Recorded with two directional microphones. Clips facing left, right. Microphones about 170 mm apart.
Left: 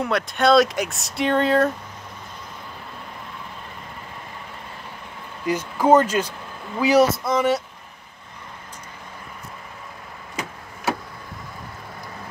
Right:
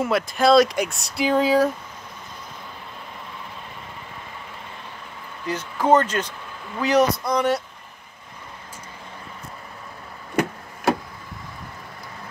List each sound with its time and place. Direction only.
0.0 s speech: centre (ahead or behind)
5.5 s speech: 10° left (ahead or behind)
10.4 s a sound: 60° right (ahead or behind)